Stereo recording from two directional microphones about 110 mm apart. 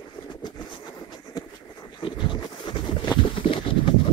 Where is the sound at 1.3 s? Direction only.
35° left (ahead or behind); by 3.9 s 55° left (ahead or behind).